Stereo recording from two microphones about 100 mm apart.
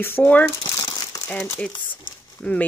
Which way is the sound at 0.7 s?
45° left (ahead or behind).